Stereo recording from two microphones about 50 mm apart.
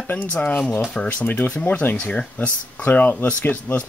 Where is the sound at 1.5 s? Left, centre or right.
Left.